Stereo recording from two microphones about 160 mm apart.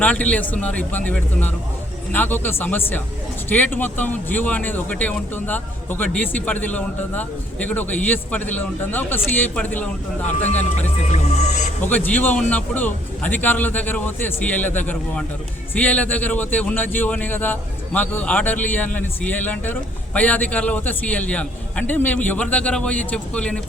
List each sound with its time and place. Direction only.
0.0 s speech: 10° left (ahead or behind)
10.2 s speech: 45° left (ahead or behind)
11.9 s speech: 10° left (ahead or behind)